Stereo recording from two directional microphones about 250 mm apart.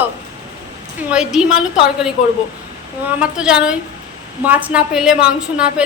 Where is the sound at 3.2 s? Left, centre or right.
Centre.